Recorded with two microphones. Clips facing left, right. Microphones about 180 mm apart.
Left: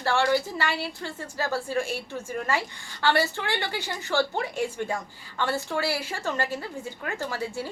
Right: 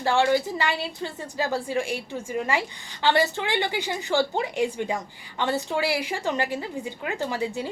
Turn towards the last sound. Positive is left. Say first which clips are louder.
# right 3 dB
turn(degrees=-15)  # may be behind; listen again after turning